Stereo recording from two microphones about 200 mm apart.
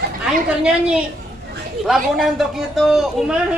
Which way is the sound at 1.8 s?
Centre (ahead or behind).